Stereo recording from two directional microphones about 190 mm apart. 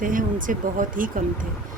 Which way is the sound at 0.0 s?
45° right (ahead or behind).